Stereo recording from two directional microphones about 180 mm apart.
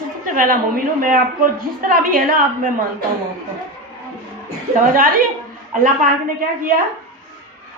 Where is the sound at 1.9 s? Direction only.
50° right (ahead or behind).